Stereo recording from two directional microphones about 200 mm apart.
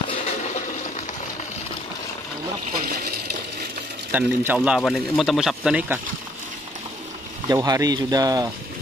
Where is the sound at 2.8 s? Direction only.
50° right (ahead or behind).